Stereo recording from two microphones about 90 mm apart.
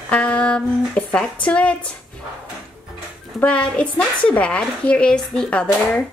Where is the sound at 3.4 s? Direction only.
10° left (ahead or behind).